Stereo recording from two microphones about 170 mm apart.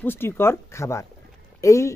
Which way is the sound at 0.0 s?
15° left (ahead or behind).